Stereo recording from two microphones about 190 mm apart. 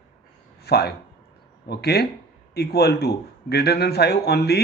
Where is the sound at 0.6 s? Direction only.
60° left (ahead or behind).